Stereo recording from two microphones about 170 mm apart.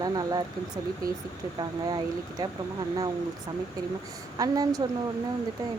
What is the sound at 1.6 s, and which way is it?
Speech, 25° right (ahead or behind).